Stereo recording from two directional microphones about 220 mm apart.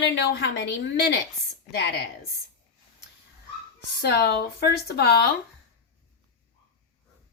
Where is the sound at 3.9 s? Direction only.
45° left (ahead or behind).